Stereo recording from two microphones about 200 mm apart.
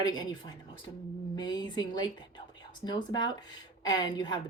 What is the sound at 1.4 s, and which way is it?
Speech, 20° left (ahead or behind).